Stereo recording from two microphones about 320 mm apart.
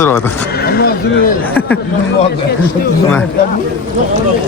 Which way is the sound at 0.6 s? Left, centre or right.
Left.